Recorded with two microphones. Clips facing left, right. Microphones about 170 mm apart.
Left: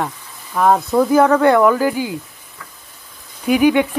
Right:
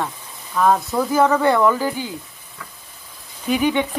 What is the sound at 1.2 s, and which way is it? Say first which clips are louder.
Speech: left 4 dB; 5° left (ahead or behind).